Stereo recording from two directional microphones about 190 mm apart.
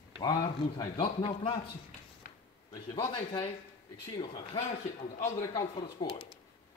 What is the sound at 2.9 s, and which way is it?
A man's voice, 25° left (ahead or behind).